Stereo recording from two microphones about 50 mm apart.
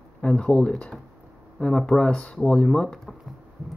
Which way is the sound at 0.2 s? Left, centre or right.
Left.